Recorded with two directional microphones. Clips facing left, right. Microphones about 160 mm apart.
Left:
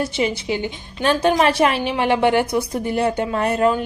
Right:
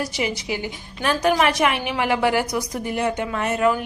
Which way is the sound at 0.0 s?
25° left (ahead or behind).